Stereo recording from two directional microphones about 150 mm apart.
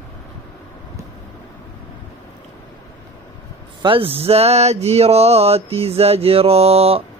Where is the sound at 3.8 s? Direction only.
35° right (ahead or behind).